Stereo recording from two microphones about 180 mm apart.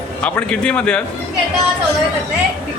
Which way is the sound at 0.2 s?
5° left (ahead or behind).